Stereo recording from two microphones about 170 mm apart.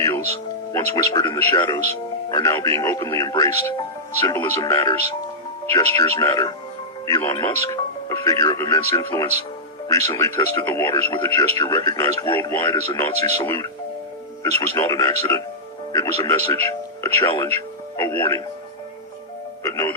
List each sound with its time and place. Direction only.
0.7 s speech: 20° left (ahead or behind)
17.9 s speech: 15° left (ahead or behind)
19.6 s speech: 20° left (ahead or behind)